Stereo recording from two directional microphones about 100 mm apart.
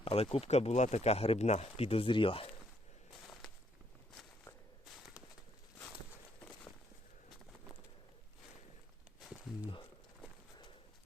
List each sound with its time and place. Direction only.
0.0 s speech: 75° left (ahead or behind)